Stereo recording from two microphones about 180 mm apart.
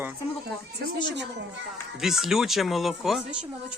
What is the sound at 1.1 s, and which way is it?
Speech, 75° right (ahead or behind).